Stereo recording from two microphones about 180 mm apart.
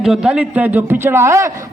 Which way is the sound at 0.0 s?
5° right (ahead or behind).